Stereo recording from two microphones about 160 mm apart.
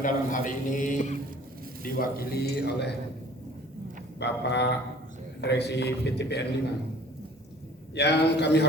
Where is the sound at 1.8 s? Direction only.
70° left (ahead or behind); by 2.9 s 90° left.